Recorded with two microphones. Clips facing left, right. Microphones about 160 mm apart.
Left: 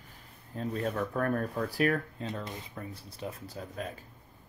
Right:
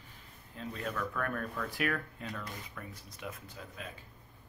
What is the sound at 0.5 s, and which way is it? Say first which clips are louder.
Speech: left 6 dB; 35° left (ahead or behind).